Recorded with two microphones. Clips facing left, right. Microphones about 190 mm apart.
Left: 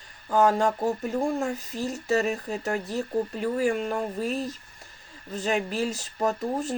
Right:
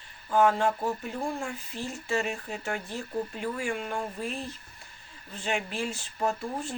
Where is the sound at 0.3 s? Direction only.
40° left (ahead or behind).